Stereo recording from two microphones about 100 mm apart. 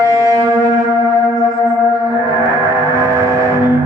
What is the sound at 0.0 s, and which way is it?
Wind instrument, 30° right (ahead or behind).